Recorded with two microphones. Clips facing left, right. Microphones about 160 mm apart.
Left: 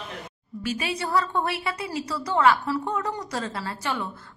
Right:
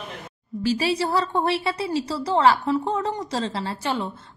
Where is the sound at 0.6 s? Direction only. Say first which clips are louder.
Right 6 dB; 30° right (ahead or behind).